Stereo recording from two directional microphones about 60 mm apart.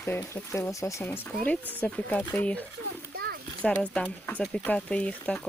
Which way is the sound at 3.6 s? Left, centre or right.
Left.